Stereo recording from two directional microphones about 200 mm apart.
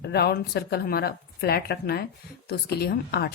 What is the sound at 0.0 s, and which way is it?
Speech, 55° left (ahead or behind).